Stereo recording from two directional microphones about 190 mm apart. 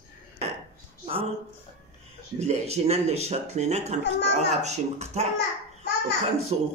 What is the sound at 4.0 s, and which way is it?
Speech, 60° left (ahead or behind).